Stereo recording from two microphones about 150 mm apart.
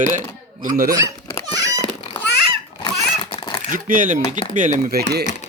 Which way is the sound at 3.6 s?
65° right (ahead or behind).